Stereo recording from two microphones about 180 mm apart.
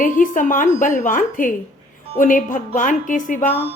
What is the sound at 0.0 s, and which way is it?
A woman's voice, 50° left (ahead or behind).